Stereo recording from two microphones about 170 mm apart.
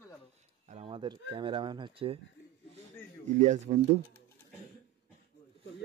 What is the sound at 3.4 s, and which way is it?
Speech, 45° right (ahead or behind).